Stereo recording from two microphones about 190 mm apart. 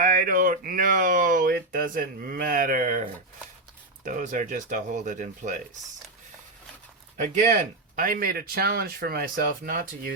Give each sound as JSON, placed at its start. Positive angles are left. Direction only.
{"t": 0.0, "sound": "speech", "side_deg": -45}
{"t": 4.0, "sound": "speech", "side_deg": -40}
{"t": 7.2, "sound": "speech", "side_deg": -40}